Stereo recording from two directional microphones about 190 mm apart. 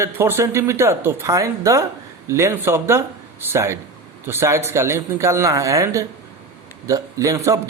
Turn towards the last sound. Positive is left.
turn(degrees=-15)  # may be behind; listen again after turning